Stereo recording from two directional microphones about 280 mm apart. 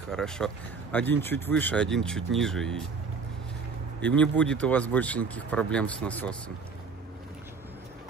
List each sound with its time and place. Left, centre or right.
0.1 s speech: centre
4.0 s speech: centre